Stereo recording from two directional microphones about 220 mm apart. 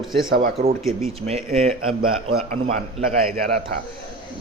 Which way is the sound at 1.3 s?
30° right (ahead or behind).